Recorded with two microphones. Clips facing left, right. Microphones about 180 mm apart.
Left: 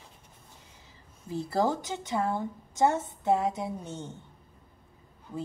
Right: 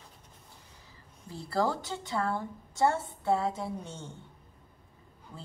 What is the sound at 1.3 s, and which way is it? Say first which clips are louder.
A woman's voice: left 3 dB; 20° left (ahead or behind).